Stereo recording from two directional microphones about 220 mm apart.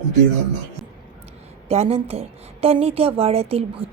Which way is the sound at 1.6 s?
30° right (ahead or behind).